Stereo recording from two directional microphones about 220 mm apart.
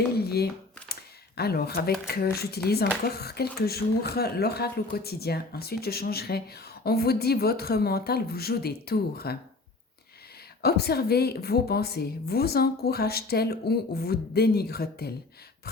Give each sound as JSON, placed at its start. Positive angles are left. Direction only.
{"t": 0.2, "sound": "squish", "side_deg": 45}
{"t": 1.4, "sound": "speech", "side_deg": 45}
{"t": 10.6, "sound": "speech", "side_deg": 45}